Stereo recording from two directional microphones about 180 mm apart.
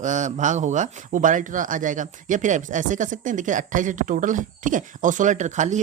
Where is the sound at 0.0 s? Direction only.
45° right (ahead or behind).